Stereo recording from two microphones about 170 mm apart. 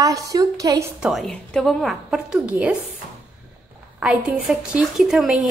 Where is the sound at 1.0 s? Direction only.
Centre (ahead or behind).